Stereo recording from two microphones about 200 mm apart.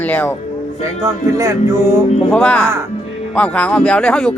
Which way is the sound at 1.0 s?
15° right (ahead or behind).